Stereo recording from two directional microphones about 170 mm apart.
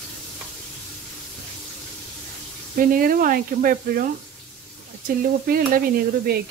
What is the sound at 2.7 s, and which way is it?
Speech, 55° right (ahead or behind).